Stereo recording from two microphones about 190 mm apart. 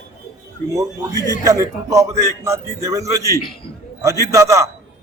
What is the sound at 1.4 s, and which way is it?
A man's voice, 15° right (ahead or behind).